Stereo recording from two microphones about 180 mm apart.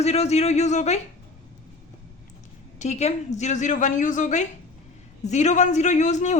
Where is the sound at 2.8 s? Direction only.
40° left (ahead or behind).